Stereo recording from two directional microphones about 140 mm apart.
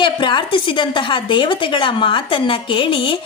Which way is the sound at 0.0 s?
35° left (ahead or behind).